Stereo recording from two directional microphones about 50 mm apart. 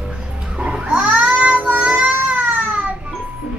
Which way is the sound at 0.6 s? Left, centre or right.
Right.